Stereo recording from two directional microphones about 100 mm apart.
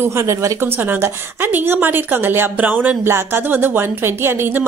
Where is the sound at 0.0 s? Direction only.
30° right (ahead or behind).